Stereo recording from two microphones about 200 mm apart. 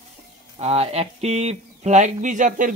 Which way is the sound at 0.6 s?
30° right (ahead or behind).